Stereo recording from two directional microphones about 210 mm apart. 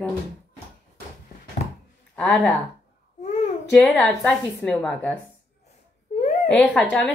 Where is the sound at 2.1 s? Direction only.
5° left (ahead or behind).